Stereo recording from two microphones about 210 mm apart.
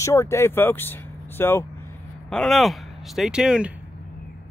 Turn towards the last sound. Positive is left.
turn(degrees=-5)  # may be behind; listen again after turning